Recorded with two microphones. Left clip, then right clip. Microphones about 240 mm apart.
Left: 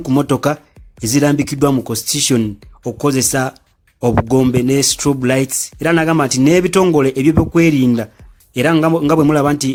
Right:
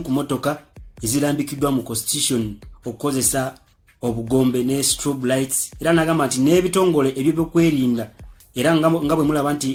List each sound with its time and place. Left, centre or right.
0.0 s speech: left